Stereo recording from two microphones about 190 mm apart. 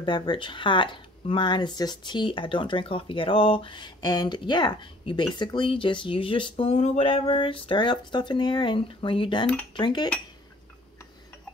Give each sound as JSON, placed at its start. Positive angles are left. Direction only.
{"t": 0.0, "sound": "speech", "side_deg": 25}